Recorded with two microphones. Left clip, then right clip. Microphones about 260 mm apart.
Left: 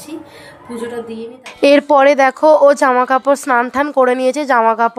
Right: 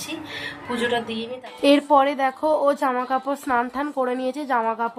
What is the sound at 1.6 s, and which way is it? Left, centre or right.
Speech, left.